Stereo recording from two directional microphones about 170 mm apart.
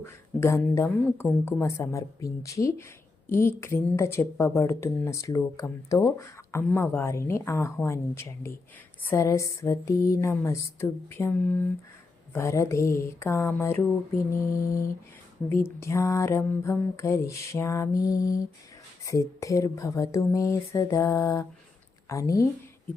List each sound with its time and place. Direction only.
0.0 s a woman's voice: 15° left (ahead or behind)